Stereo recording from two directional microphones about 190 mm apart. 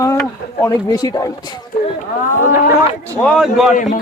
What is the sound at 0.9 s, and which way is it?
Speech, 20° left (ahead or behind).